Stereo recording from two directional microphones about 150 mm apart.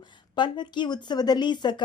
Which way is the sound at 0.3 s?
30° left (ahead or behind).